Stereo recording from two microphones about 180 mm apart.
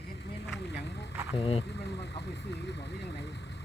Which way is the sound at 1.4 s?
35° left (ahead or behind).